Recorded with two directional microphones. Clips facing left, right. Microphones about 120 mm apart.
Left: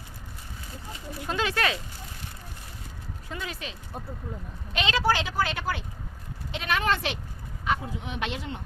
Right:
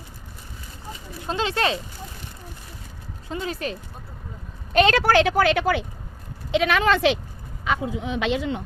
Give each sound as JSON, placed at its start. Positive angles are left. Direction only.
{"t": 1.3, "sound": "speech", "side_deg": -25}
{"t": 3.2, "sound": "speech", "side_deg": -30}
{"t": 4.7, "sound": "a woman's voice", "side_deg": -50}
{"t": 7.6, "sound": "a sound", "side_deg": -90}
{"t": 8.2, "sound": "a woman's voice", "side_deg": -90}